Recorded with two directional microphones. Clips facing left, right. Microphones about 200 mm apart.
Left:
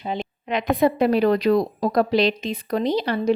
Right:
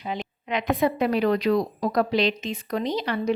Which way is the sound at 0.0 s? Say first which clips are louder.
Left 3 dB; 30° left (ahead or behind).